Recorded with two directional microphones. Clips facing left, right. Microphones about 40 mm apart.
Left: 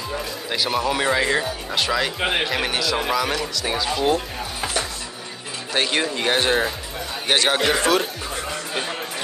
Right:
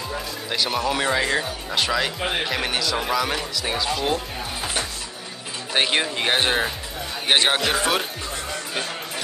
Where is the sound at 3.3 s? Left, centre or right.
Centre.